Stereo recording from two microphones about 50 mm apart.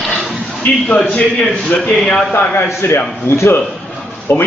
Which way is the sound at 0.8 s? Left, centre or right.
Left.